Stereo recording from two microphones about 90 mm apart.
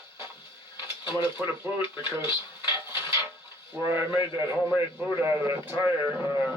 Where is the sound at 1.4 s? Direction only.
25° right (ahead or behind).